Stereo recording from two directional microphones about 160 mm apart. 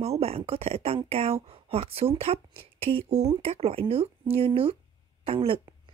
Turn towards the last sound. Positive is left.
turn(degrees=-35)  # may be behind; listen again after turning